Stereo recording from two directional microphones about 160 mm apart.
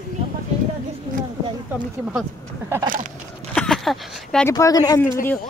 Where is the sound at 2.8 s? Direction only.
60° right (ahead or behind).